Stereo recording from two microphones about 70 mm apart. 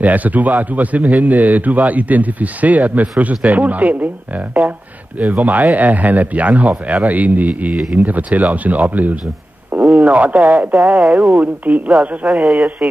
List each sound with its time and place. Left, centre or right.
0.0 s speech: right
5.2 s speech: right
9.7 s a sound: right
10.0 s speech: centre
10.8 s speech: centre
11.1 s speech: centre
12.3 s a man's voice: centre